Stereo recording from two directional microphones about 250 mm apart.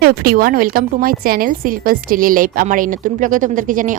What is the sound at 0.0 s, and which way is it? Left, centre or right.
A woman's voice, right.